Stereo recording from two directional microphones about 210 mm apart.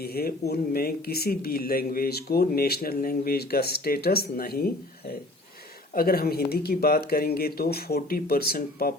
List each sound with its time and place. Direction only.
0.0 s speech: 45° left (ahead or behind)